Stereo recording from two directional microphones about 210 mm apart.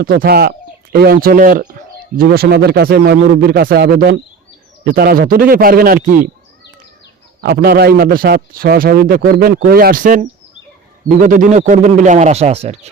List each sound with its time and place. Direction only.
0.0 s a man's voice: 45° right (ahead or behind)
7.4 s a man's voice: 50° right (ahead or behind); by 12.9 s 30° right (ahead or behind)